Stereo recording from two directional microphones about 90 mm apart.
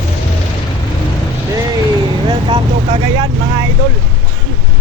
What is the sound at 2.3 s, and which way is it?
Vehicle, 70° right (ahead or behind).